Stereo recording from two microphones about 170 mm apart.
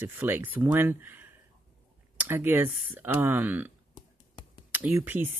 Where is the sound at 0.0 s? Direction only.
10° right (ahead or behind).